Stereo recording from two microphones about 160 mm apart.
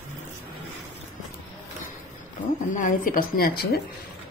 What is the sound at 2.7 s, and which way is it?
Speech, 55° left (ahead or behind).